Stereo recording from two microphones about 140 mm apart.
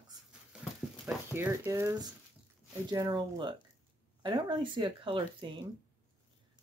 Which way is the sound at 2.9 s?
30° right (ahead or behind).